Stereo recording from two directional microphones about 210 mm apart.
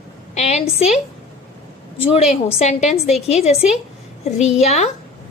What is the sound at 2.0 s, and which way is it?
A woman's voice, 30° left (ahead or behind).